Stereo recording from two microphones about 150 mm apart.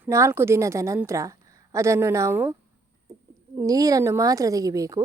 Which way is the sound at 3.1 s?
20° right (ahead or behind).